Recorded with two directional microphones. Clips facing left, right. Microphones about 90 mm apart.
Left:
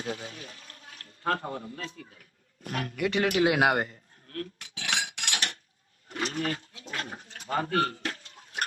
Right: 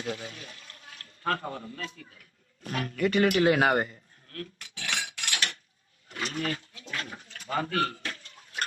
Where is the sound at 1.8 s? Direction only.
35° left (ahead or behind).